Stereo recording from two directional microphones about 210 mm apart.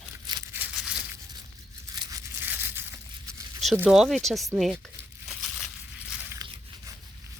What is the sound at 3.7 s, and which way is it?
Speech, 5° right (ahead or behind).